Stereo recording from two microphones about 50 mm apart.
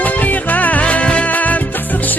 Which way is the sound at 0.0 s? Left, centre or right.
Left.